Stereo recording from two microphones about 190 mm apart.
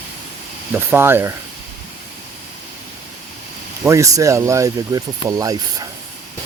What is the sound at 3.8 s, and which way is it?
Speech, 15° right (ahead or behind).